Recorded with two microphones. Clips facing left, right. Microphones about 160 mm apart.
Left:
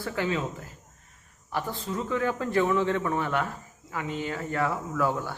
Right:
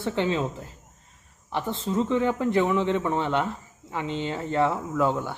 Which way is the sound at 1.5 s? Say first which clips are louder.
Right 5 dB; 25° right (ahead or behind).